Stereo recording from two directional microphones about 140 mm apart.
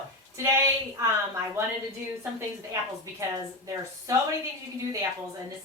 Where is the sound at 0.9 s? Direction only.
20° right (ahead or behind).